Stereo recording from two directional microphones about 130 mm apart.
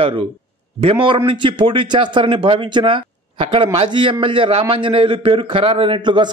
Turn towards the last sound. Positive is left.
turn(degrees=-35)  # may be behind; listen again after turning